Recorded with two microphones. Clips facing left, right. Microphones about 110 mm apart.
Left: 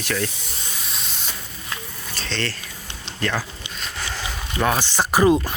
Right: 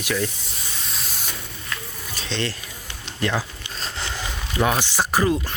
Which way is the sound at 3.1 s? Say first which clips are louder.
Right 1 dB; 15° right (ahead or behind).